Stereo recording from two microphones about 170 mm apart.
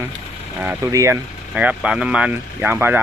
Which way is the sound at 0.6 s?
15° right (ahead or behind).